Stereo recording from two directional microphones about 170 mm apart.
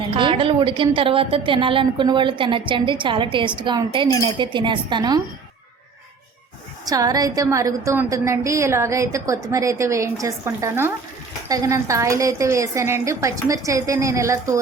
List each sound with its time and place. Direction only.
0.1 s a woman's voice: 30° right (ahead or behind)
6.8 s a woman's voice: 20° right (ahead or behind)